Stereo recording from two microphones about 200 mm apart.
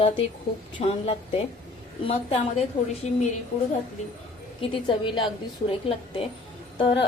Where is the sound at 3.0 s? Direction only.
35° left (ahead or behind).